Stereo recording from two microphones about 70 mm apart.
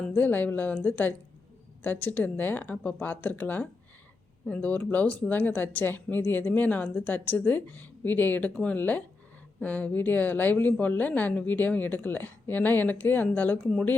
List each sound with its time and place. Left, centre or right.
0.1 s speech: left